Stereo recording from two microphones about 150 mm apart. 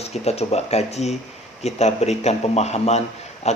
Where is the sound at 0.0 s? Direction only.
45° left (ahead or behind).